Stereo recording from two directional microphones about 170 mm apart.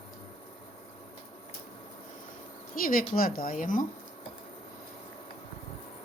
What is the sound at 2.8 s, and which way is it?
Speech, 55° left (ahead or behind).